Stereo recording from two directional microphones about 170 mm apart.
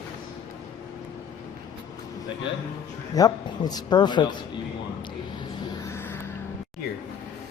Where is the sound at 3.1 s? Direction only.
25° left (ahead or behind).